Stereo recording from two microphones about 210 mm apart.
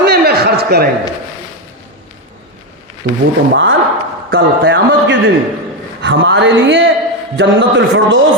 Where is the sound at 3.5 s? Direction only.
65° right (ahead or behind).